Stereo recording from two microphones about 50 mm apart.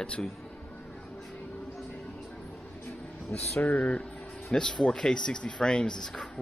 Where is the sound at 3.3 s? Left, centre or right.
Left.